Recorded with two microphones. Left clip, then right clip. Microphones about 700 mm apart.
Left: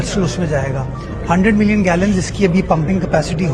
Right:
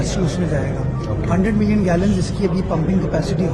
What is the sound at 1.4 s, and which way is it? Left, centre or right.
Speech, left.